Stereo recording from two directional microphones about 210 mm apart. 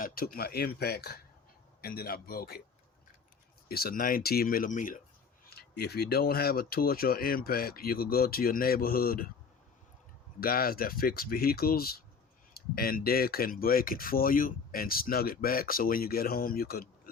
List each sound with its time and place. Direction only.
0.0 s speech: 45° left (ahead or behind)
3.7 s speech: 45° left (ahead or behind)
10.4 s speech: 45° left (ahead or behind)